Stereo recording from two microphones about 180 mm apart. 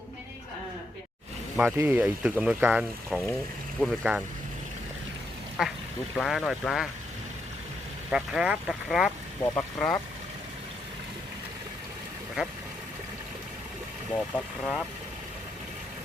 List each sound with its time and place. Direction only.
1.5 s speech: 10° right (ahead or behind)
5.6 s speech: 5° right (ahead or behind)
8.1 s speech: 5° right (ahead or behind)
9.4 s speech: 10° left (ahead or behind)
14.1 s speech: centre (ahead or behind)